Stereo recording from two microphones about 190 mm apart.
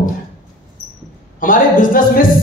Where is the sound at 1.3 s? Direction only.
45° left (ahead or behind).